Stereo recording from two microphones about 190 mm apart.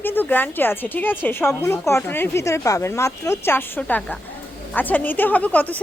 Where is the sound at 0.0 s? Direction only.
10° left (ahead or behind).